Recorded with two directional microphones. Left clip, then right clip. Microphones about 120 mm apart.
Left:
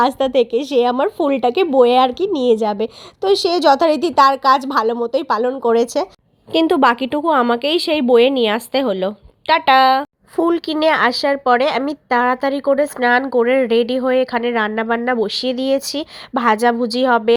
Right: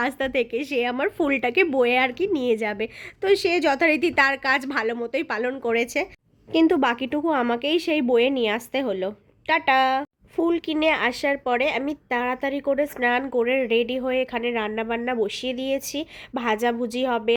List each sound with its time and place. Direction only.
0.0 s a woman's voice: 40° left (ahead or behind)
1.2 s a woman's voice: 10° right (ahead or behind)
6.5 s a woman's voice: 40° left (ahead or behind)